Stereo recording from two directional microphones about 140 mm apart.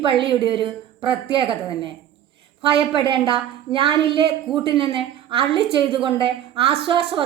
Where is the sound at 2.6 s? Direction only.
40° right (ahead or behind).